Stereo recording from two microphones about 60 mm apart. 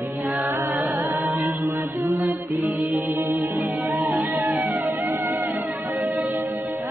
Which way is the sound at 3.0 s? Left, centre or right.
Right.